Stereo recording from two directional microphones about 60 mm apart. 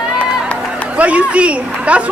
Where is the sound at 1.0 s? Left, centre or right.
Right.